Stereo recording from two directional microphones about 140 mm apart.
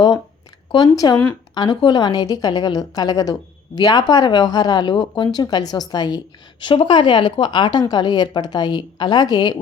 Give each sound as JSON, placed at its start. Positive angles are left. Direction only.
{"t": 0.7, "sound": "a woman's voice", "side_deg": 30}